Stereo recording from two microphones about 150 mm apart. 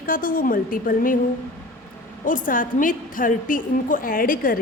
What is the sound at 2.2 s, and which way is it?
A woman's voice, 65° left (ahead or behind).